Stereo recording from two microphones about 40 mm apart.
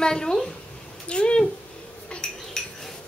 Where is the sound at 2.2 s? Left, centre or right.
Centre.